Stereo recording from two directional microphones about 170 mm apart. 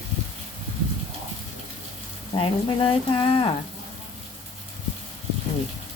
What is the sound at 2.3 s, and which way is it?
Speech, 30° left (ahead or behind).